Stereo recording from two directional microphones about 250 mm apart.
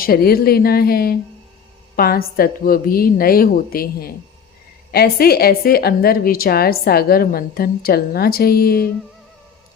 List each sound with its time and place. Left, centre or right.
0.0 s a woman's voice: left